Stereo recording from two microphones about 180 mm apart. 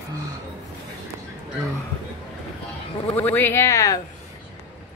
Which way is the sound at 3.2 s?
10° left (ahead or behind).